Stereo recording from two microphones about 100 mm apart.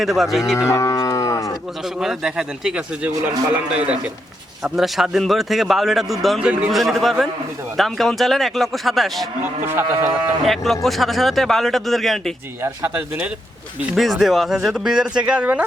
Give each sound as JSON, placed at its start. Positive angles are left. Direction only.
{"t": 0.0, "sound": "a man's voice", "side_deg": 0}
{"t": 0.7, "sound": "moo", "side_deg": 30}
{"t": 2.0, "sound": "a man's voice", "side_deg": -5}
{"t": 6.4, "sound": "a man's voice", "side_deg": -10}
{"t": 6.7, "sound": "a man's voice", "side_deg": 0}
{"t": 9.4, "sound": "moo", "side_deg": -20}
{"t": 10.4, "sound": "a man's voice", "side_deg": 0}
{"t": 13.0, "sound": "a man's voice", "side_deg": -15}
{"t": 13.9, "sound": "a man's voice", "side_deg": 0}